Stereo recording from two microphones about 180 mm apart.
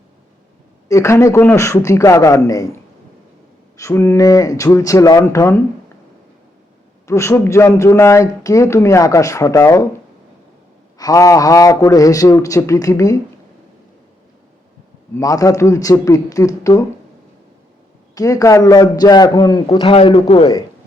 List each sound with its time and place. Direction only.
0.9 s speech: 15° left (ahead or behind)
3.8 s speech: 15° left (ahead or behind)
7.1 s speech: 15° left (ahead or behind)
10.9 s a man's voice: 20° left (ahead or behind)
15.1 s a man's voice: 20° left (ahead or behind)
18.1 s a man's voice: 20° left (ahead or behind)